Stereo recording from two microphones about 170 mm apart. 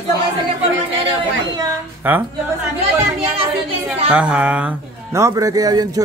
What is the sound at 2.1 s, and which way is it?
Speech, 10° right (ahead or behind).